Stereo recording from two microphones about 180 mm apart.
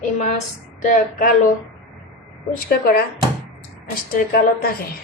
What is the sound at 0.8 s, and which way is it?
Speech, 45° left (ahead or behind).